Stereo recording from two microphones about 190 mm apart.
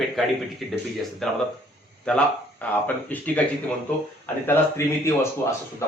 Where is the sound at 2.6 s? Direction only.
10° left (ahead or behind).